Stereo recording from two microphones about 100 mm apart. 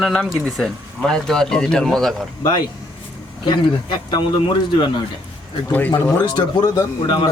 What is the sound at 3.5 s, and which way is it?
Speech, 50° left (ahead or behind).